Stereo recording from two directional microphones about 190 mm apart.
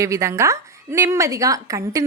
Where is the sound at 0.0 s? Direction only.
15° right (ahead or behind).